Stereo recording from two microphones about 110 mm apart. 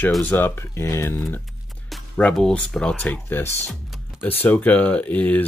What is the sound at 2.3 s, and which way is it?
Speech, 10° left (ahead or behind).